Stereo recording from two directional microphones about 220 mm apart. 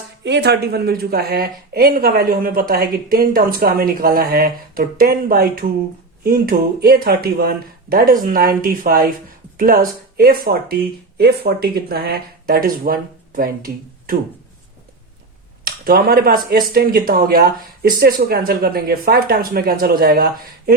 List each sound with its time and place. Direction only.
0.3 s speech: 50° right (ahead or behind)
15.6 s speech: 45° right (ahead or behind)